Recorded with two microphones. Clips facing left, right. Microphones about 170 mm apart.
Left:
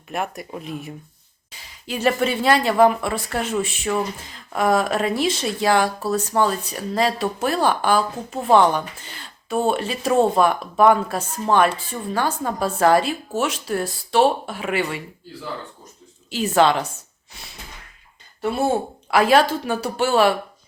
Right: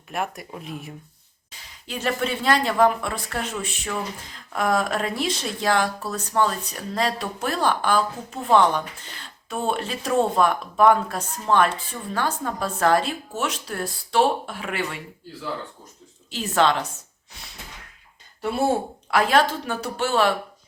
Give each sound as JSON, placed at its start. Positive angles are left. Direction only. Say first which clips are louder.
{"t": 0.1, "sound": "speech", "louder": "left 2 dB", "side_deg": 0}
{"t": 16.3, "sound": "speech", "louder": "left 4 dB", "side_deg": 5}
{"t": 19.1, "sound": "speech", "louder": "left 4 dB", "side_deg": 5}